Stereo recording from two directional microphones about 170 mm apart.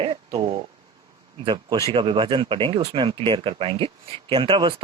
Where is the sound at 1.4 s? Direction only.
25° right (ahead or behind).